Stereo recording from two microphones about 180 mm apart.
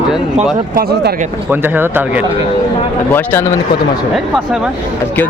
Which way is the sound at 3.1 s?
10° left (ahead or behind).